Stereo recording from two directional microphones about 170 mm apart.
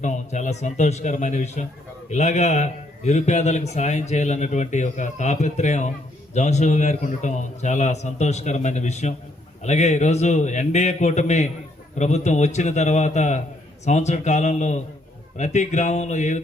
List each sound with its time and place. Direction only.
0.0 s a man's voice: 45° left (ahead or behind)